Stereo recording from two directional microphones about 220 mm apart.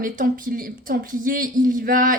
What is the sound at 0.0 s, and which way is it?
Speech, 40° right (ahead or behind).